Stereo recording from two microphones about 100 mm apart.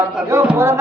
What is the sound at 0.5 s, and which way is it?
Speech, 25° right (ahead or behind).